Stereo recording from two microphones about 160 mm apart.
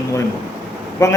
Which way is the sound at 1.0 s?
20° left (ahead or behind).